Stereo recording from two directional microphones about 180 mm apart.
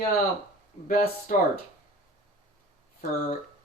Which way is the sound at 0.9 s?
55° left (ahead or behind).